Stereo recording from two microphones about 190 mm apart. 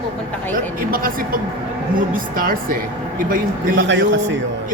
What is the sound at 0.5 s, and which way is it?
Speech, 50° right (ahead or behind).